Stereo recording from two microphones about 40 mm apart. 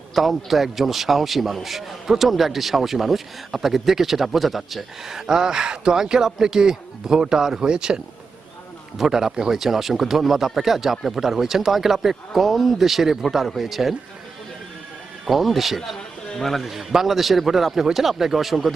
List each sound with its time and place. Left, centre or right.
0.1 s a man's voice: centre
15.3 s speech: centre
16.3 s a man's voice: centre
16.6 s a man's voice: centre